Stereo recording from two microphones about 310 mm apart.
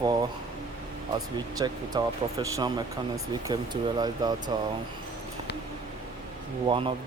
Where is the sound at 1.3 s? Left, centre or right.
Centre.